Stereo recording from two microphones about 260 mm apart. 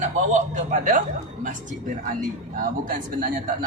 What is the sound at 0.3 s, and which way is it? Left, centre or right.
Speech, right.